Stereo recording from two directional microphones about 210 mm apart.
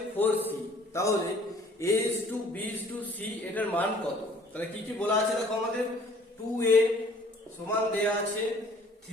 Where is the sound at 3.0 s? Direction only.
10° left (ahead or behind).